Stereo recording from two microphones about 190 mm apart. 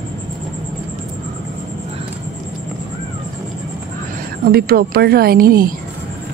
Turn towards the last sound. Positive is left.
turn(degrees=-50)  # may be behind; listen again after turning